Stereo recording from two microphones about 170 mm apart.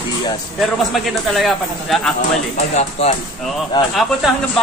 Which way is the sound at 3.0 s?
35° left (ahead or behind).